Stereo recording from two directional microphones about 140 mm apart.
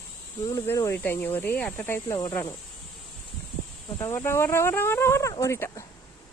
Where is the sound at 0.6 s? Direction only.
20° left (ahead or behind).